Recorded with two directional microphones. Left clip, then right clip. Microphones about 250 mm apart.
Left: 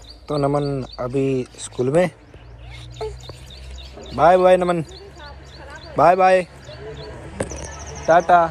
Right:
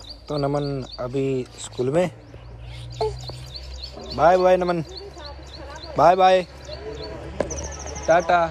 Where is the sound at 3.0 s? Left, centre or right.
Right.